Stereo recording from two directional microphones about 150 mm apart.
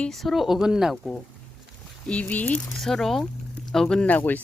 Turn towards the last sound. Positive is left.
turn(degrees=10)  # may be behind; listen again after turning